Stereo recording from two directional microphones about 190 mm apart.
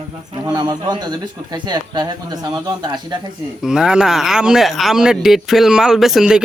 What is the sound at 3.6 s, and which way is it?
Speech, 5° right (ahead or behind).